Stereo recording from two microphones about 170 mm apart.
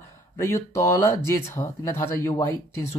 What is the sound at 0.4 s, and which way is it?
Speech, 20° left (ahead or behind).